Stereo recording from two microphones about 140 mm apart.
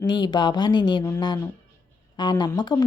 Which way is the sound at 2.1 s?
30° left (ahead or behind).